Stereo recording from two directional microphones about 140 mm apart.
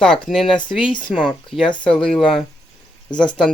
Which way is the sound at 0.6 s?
35° left (ahead or behind).